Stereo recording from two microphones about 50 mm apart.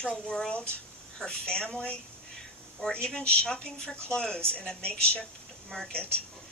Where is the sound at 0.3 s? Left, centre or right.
Centre.